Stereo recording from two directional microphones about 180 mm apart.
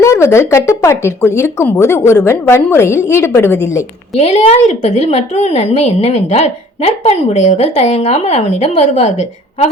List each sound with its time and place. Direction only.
0.0 s speech: 15° left (ahead or behind)
4.2 s a woman's voice: 35° left (ahead or behind)